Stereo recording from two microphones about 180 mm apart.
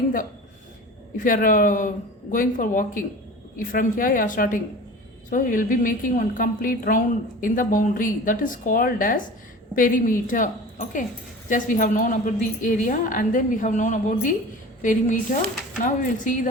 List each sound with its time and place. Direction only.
1.2 s a woman's voice: 50° left (ahead or behind)